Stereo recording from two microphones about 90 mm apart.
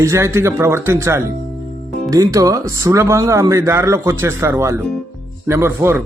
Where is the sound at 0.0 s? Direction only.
30° right (ahead or behind).